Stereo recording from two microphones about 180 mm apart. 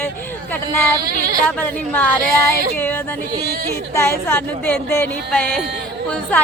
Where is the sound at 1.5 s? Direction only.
10° left (ahead or behind).